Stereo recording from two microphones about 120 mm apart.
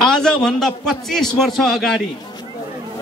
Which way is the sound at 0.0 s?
5° left (ahead or behind).